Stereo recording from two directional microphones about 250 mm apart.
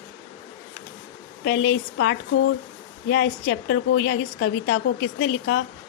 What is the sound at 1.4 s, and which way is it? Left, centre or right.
A woman's voice, left.